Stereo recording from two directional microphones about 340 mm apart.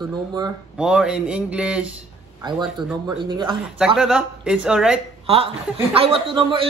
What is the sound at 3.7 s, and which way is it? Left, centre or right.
Speech, centre.